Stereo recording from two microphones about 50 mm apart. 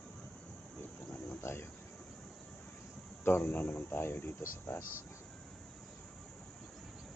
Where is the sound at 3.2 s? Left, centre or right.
Left.